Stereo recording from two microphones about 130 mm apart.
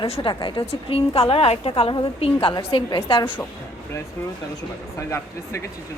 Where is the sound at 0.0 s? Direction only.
40° left (ahead or behind).